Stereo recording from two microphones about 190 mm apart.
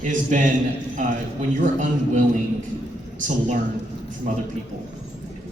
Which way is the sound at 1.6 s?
40° right (ahead or behind).